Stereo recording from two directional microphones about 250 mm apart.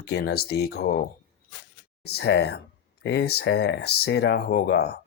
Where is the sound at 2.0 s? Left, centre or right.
Left.